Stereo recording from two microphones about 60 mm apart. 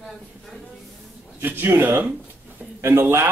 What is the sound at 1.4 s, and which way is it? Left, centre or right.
Speech, right.